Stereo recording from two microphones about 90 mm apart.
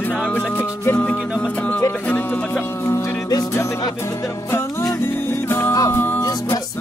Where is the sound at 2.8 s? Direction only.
30° left (ahead or behind).